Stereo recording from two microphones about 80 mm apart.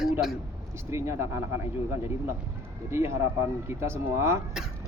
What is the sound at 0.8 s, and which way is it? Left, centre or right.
Speech, right.